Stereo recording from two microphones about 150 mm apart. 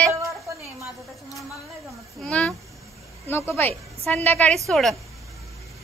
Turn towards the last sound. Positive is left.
turn(degrees=0)  # may be behind; listen again after turning